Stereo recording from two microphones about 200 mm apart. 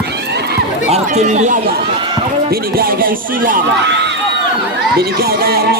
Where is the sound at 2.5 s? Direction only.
50° right (ahead or behind).